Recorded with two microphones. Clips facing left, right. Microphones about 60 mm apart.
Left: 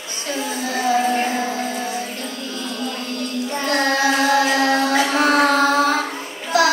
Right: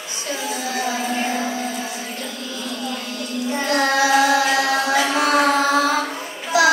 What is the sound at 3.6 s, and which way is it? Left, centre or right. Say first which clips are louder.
Music: even; left.